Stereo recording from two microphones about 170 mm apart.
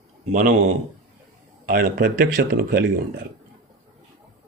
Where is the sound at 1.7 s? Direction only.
60° right (ahead or behind).